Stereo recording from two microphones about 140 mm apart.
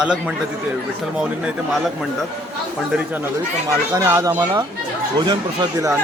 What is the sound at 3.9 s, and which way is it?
Speech, 20° right (ahead or behind).